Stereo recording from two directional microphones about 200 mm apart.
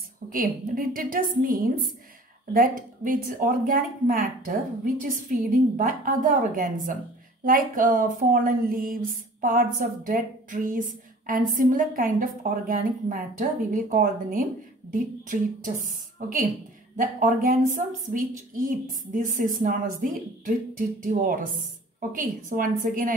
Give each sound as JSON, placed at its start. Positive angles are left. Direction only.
{"t": 0.3, "sound": "speech", "side_deg": -45}
{"t": 5.8, "sound": "speech", "side_deg": -40}